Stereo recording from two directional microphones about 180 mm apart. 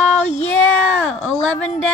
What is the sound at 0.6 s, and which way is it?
Speech, 10° left (ahead or behind).